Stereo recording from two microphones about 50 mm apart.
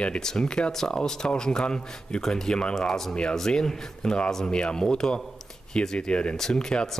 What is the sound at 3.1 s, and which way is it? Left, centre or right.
Speech, centre.